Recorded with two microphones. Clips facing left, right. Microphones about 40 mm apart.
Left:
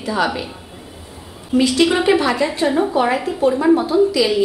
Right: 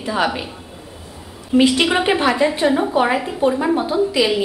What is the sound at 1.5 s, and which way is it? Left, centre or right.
A woman's voice, right.